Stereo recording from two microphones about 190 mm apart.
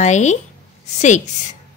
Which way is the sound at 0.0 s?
40° left (ahead or behind).